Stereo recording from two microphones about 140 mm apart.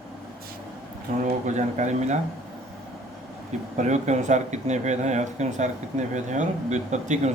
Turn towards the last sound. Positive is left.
turn(degrees=-55)  # may be behind; listen again after turning